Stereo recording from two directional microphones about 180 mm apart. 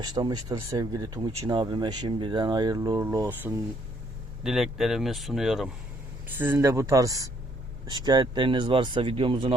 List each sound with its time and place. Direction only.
0.0 s speech: 25° right (ahead or behind)
4.4 s speech: centre (ahead or behind)
6.2 s speech: 10° right (ahead or behind); by 9.5 s 30° right (ahead or behind)